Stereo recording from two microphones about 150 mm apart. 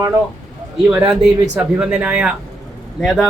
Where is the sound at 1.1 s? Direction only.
5° right (ahead or behind).